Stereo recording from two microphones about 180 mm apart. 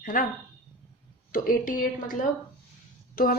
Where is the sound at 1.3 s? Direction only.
50° left (ahead or behind).